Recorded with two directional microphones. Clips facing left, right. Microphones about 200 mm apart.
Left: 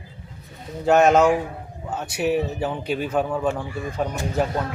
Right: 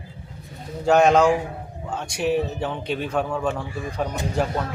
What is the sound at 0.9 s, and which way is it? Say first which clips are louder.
A man's voice: even; 5° left (ahead or behind).